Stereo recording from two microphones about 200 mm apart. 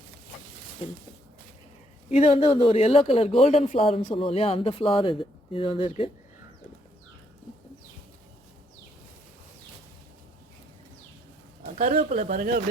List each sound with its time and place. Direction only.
2.0 s speech: 35° left (ahead or behind)
11.6 s speech: 40° right (ahead or behind)